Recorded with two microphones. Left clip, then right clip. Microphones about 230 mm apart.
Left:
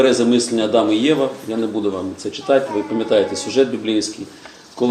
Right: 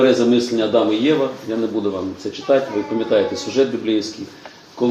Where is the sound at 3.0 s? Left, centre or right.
Left.